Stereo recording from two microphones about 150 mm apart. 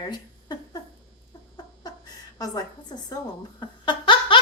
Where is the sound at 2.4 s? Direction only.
25° left (ahead or behind).